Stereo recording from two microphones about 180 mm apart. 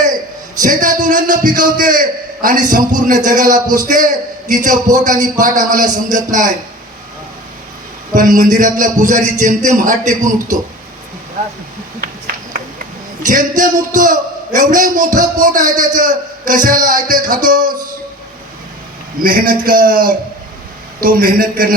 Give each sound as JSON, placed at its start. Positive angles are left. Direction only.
{"t": 0.6, "sound": "a man's voice", "side_deg": -50}
{"t": 8.1, "sound": "a man's voice", "side_deg": -50}
{"t": 13.6, "sound": "a man's voice", "side_deg": -50}
{"t": 19.2, "sound": "a man's voice", "side_deg": -50}